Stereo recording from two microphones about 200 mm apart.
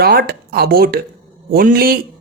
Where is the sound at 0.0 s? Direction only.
50° right (ahead or behind).